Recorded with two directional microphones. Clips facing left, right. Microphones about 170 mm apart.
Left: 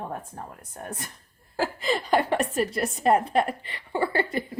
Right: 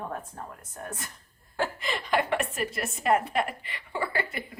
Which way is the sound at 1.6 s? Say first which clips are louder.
Left 4 dB; 35° left (ahead or behind).